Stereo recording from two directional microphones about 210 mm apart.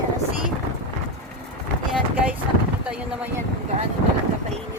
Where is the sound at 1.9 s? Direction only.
5° right (ahead or behind).